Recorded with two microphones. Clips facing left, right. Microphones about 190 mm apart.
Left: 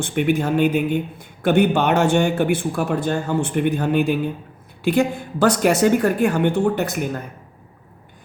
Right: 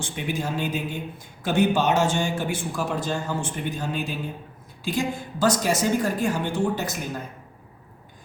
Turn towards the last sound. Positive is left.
turn(degrees=60)  # may be behind; listen again after turning